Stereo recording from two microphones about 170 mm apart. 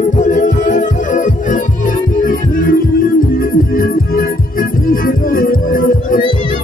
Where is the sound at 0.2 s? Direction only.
50° left (ahead or behind).